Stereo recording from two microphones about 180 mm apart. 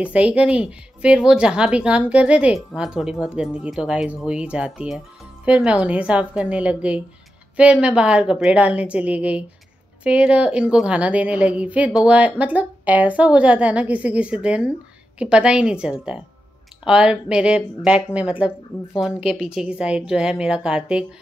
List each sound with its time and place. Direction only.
0.0 s a woman's voice: 5° right (ahead or behind)